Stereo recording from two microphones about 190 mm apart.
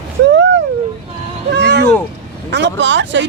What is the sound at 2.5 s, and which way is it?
Speech, 70° right (ahead or behind).